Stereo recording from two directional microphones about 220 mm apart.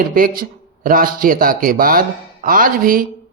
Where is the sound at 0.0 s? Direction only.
40° right (ahead or behind).